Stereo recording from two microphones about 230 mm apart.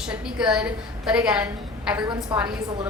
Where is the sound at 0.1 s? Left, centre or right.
Centre.